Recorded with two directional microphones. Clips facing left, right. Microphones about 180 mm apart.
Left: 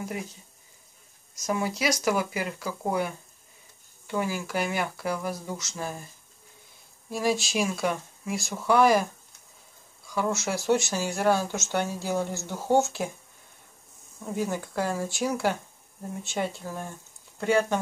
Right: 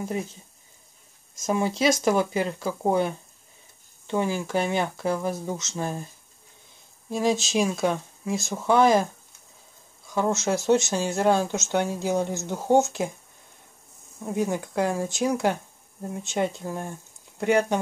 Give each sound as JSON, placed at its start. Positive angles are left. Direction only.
{"t": 1.4, "sound": "speech", "side_deg": -25}
{"t": 4.1, "sound": "speech", "side_deg": -25}
{"t": 7.1, "sound": "speech", "side_deg": -20}
{"t": 10.0, "sound": "speech", "side_deg": -20}
{"t": 14.2, "sound": "speech", "side_deg": -15}